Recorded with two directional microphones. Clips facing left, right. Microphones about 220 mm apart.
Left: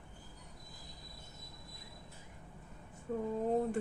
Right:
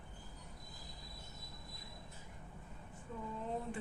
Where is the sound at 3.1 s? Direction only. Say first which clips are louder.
Left 10 dB; 55° left (ahead or behind).